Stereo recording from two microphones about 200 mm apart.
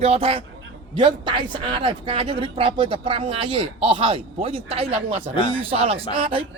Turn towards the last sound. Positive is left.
turn(degrees=-30)  # may be behind; listen again after turning